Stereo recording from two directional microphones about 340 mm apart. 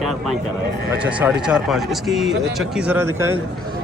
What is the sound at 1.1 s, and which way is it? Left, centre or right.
Speech, centre.